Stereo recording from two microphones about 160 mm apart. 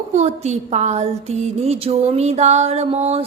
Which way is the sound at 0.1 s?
40° right (ahead or behind).